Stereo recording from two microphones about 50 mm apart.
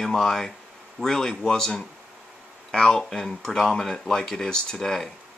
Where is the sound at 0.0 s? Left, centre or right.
Centre.